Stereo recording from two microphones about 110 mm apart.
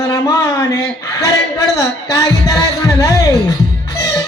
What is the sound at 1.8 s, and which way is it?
Speech, 30° left (ahead or behind).